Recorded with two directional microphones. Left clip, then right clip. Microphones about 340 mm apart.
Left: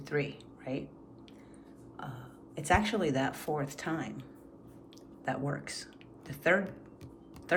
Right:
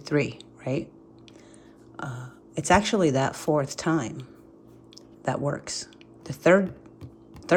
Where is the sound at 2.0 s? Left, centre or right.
Centre.